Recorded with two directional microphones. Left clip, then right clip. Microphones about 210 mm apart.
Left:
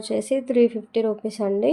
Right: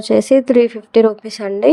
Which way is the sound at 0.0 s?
30° right (ahead or behind).